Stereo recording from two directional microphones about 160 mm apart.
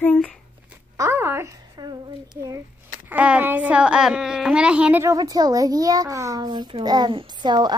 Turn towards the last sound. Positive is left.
turn(degrees=-25)  # may be behind; listen again after turning